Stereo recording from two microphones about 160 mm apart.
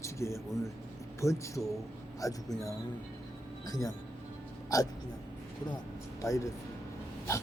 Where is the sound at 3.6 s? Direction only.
20° left (ahead or behind).